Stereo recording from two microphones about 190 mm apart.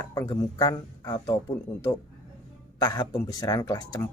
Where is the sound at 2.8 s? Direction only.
20° left (ahead or behind).